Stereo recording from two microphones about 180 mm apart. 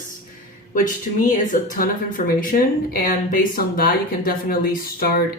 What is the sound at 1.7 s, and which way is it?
Speech, 50° left (ahead or behind).